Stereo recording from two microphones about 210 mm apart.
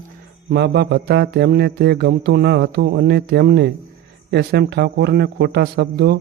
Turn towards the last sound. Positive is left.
turn(degrees=-55)  # may be behind; listen again after turning